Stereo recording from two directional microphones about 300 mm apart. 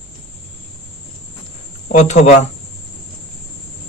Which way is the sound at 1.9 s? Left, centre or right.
Left.